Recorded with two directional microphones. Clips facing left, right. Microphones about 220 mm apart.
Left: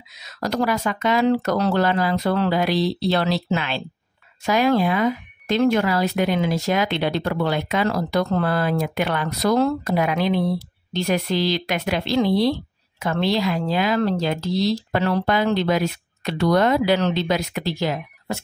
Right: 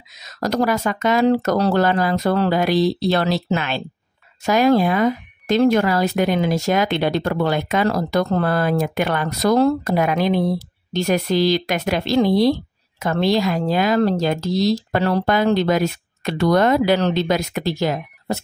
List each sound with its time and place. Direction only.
0.2 s speech: 45° right (ahead or behind)